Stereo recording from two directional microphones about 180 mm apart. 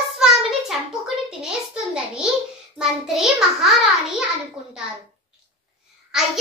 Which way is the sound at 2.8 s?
Centre (ahead or behind).